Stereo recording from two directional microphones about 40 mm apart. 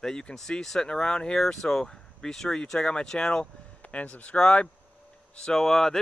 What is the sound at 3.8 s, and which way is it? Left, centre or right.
Speech, left.